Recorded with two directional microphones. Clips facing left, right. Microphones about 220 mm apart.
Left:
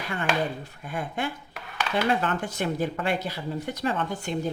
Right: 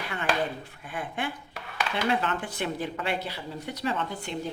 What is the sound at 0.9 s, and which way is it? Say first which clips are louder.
Speech: left 3 dB; 45° left (ahead or behind).